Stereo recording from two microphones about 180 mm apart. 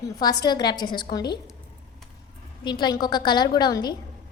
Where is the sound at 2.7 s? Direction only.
25° left (ahead or behind).